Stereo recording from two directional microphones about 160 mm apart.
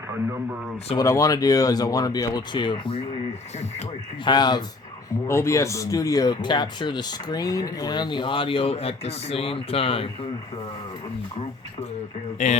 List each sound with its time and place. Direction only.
0.9 s speech: 20° left (ahead or behind)
4.2 s speech: 25° left (ahead or behind)
12.4 s speech: 50° left (ahead or behind)